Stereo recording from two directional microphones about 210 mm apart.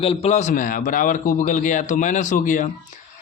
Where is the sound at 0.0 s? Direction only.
25° left (ahead or behind).